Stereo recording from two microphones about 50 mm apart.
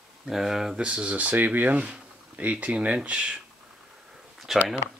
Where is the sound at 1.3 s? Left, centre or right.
Right.